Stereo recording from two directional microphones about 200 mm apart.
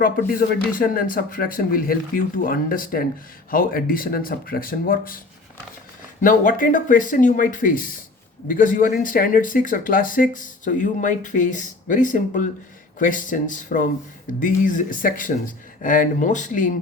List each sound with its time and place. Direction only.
0.0 s speech: 45° left (ahead or behind)
6.2 s speech: 40° left (ahead or behind)